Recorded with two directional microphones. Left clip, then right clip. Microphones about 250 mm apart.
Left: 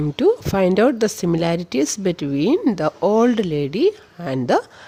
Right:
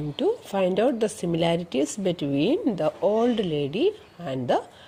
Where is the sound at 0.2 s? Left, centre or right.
Left.